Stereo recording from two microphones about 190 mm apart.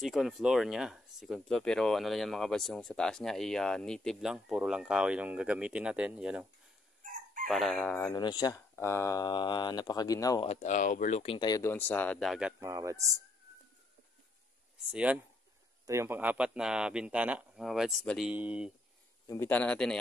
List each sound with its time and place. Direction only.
0.0 s speech: centre (ahead or behind)
7.4 s speech: centre (ahead or behind)
7.9 s speech: 20° left (ahead or behind)
10.5 s speech: 40° left (ahead or behind); by 13.2 s 15° right (ahead or behind)
14.9 s speech: 5° right (ahead or behind)
19.2 s speech: 15° left (ahead or behind)